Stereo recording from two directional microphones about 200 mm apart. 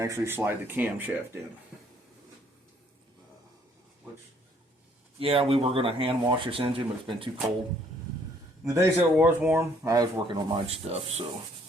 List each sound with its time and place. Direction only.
0.0 s speech: 15° right (ahead or behind)
5.2 s speech: 30° right (ahead or behind)
8.6 s speech: 15° right (ahead or behind)
10.7 s speech: 30° right (ahead or behind)